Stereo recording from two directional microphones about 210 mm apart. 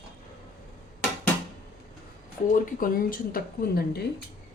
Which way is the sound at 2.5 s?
40° left (ahead or behind).